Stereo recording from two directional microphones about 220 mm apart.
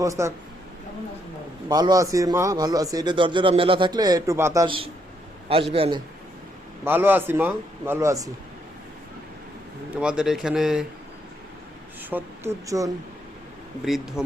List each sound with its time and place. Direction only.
0.0 s a man's voice: 15° right (ahead or behind)
1.6 s a man's voice: 15° right (ahead or behind)
6.8 s a man's voice: 10° right (ahead or behind)
9.9 s speech: 5° right (ahead or behind)
12.1 s a man's voice: 10° right (ahead or behind)
13.8 s speech: centre (ahead or behind)